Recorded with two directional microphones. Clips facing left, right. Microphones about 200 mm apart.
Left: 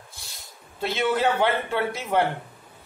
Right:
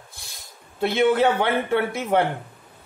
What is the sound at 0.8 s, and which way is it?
A man's voice, 55° right (ahead or behind).